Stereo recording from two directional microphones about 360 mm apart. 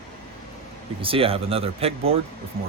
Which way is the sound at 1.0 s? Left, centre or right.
Centre.